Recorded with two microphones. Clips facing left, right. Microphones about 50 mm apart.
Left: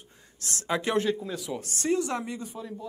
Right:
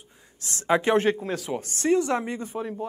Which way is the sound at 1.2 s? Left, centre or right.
Right.